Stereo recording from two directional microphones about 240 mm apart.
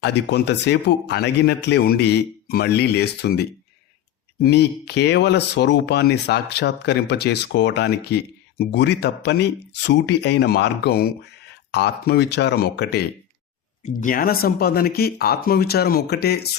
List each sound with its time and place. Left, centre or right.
0.0 s speech: left